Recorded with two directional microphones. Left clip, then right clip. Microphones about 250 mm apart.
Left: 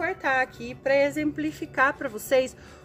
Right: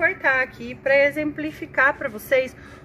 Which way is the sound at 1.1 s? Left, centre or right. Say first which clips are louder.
Right 2 dB; left.